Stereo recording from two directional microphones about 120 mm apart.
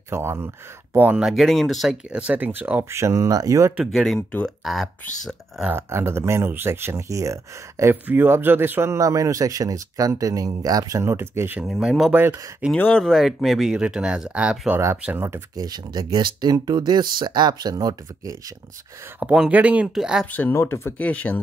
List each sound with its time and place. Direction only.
0.1 s speech: 20° right (ahead or behind)
1.2 s speech: centre (ahead or behind); by 3.7 s 25° right (ahead or behind)
3.7 s speech: centre (ahead or behind)
5.7 s speech: 20° right (ahead or behind)
11.6 s speech: centre (ahead or behind)
12.2 s speech: 15° right (ahead or behind)
12.7 s speech: 10° left (ahead or behind); by 14.8 s 10° right (ahead or behind)
15.0 s speech: 20° right (ahead or behind)
15.5 s speech: 35° right (ahead or behind)
19.1 s speech: 5° right (ahead or behind)
20.2 s speech: 15° left (ahead or behind)